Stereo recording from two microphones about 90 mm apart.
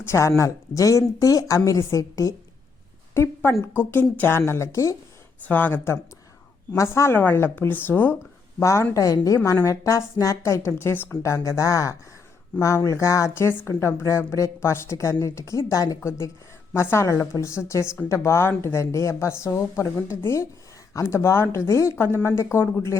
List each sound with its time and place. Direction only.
0.0 s speech: 30° left (ahead or behind)
5.4 s speech: 20° left (ahead or behind)
8.6 s speech: 30° left (ahead or behind)
16.0 s speech: 30° left (ahead or behind)